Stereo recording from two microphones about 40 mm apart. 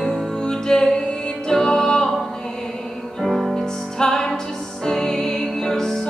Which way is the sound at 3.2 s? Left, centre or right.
Centre.